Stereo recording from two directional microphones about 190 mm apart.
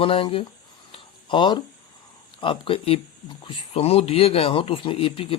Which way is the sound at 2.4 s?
25° left (ahead or behind).